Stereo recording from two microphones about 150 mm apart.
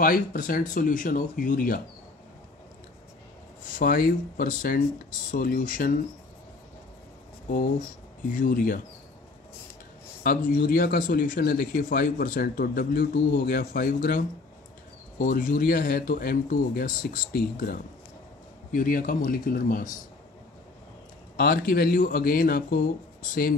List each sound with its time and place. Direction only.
0.0 s speech: 75° left (ahead or behind)
3.7 s speech: 70° left (ahead or behind)
8.3 s speech: 65° left (ahead or behind)
10.2 s speech: 65° left (ahead or behind)
21.4 s speech: 80° left